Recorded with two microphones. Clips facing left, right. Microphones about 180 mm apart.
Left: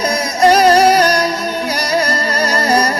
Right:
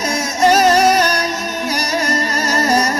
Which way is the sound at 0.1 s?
35° left (ahead or behind).